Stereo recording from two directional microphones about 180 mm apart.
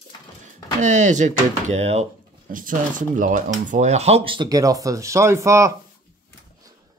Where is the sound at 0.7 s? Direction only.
40° right (ahead or behind).